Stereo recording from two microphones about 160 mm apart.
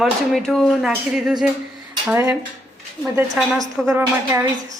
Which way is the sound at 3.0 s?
15° right (ahead or behind).